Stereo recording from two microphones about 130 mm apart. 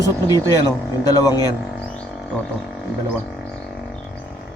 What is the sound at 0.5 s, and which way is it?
Speech, 30° left (ahead or behind).